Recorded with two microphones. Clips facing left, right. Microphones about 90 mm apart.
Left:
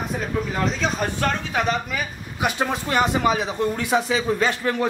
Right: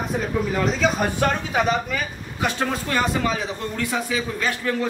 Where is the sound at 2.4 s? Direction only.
15° left (ahead or behind).